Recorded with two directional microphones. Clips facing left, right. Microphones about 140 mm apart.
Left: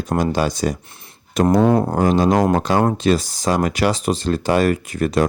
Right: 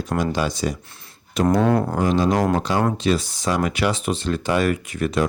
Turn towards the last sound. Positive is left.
turn(degrees=40)  # may be behind; listen again after turning